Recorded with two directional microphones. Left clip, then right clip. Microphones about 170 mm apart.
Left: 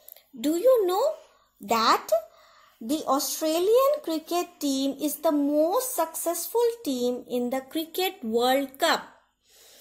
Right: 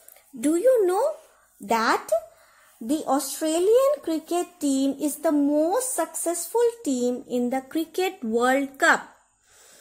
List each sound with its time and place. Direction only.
0.4 s speech: 40° right (ahead or behind)